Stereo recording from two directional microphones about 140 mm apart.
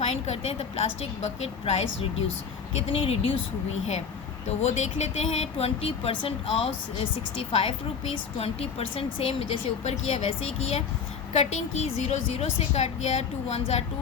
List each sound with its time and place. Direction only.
0.0 s a woman's voice: 50° left (ahead or behind)
8.1 s a woman's voice: 45° left (ahead or behind)